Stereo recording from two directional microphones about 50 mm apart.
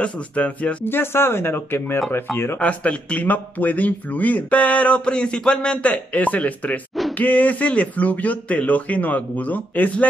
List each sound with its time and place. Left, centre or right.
0.0 s speech: left
0.8 s speech: left
2.6 s speech: left